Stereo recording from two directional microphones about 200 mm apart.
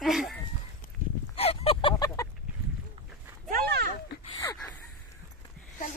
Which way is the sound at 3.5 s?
50° right (ahead or behind).